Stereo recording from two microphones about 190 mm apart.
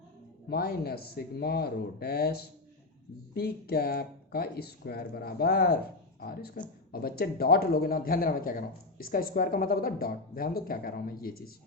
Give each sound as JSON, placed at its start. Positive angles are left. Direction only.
{"t": 0.4, "sound": "speech", "side_deg": 55}